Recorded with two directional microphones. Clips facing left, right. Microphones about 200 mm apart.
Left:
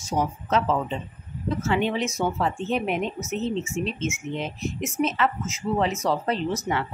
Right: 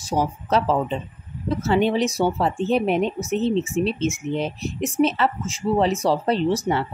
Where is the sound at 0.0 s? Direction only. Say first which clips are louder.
Right 3 dB; 35° right (ahead or behind).